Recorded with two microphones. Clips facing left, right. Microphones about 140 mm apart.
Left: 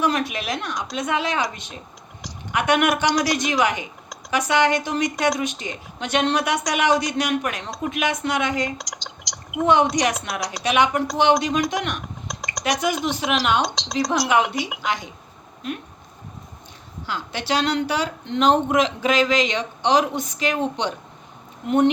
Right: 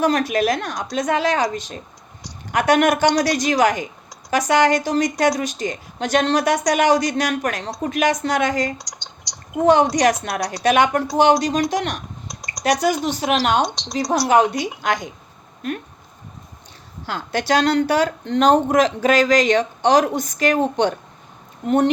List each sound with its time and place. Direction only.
0.0 s speech: 40° right (ahead or behind)
8.8 s typing: 90° left
9.9 s speech: 45° right (ahead or behind)
12.3 s a sound: 90° left
12.6 s speech: 40° right (ahead or behind)
17.1 s speech: 45° right (ahead or behind)